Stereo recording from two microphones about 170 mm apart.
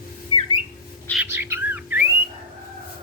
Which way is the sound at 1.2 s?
15° right (ahead or behind).